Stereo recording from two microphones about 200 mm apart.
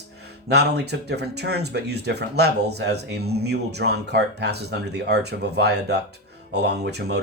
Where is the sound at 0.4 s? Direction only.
55° right (ahead or behind).